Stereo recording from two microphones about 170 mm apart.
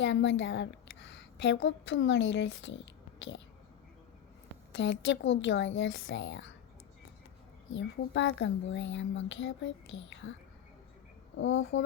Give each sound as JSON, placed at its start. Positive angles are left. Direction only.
{"t": 0.0, "sound": "a woman's voice", "side_deg": 90}
{"t": 4.7, "sound": "speech", "side_deg": 90}
{"t": 7.7, "sound": "speech", "side_deg": 90}
{"t": 11.3, "sound": "speech", "side_deg": 90}